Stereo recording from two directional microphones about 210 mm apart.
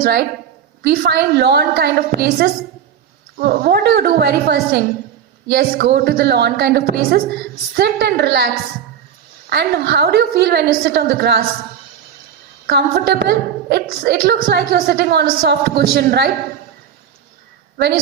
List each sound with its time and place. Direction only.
0.0 s a woman's voice: 50° right (ahead or behind)
9.5 s a woman's voice: 50° right (ahead or behind)
12.6 s a woman's voice: 50° right (ahead or behind)
17.7 s a woman's voice: 50° right (ahead or behind)